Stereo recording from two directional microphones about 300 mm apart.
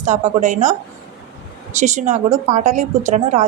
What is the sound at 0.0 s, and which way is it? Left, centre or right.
Speech, right.